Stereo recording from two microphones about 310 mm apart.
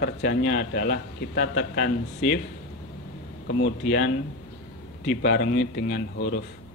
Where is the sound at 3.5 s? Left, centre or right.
Left.